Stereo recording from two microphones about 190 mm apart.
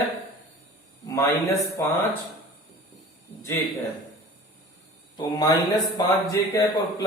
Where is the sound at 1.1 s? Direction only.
15° left (ahead or behind).